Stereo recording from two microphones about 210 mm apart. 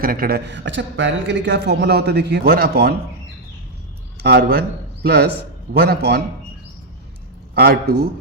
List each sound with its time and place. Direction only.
0.0 s speech: 45° right (ahead or behind)
4.2 s speech: 50° right (ahead or behind)
7.5 s a man's voice: 45° right (ahead or behind)